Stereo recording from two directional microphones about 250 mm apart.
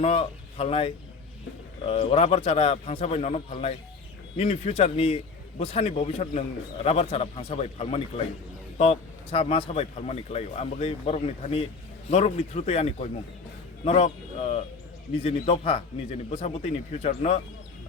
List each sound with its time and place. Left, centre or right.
0.0 s speech: left